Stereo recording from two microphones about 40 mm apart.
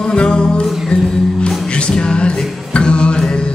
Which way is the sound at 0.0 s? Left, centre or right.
Left.